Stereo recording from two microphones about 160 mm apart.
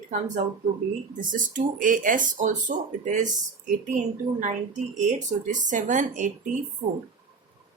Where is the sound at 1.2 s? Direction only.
55° right (ahead or behind).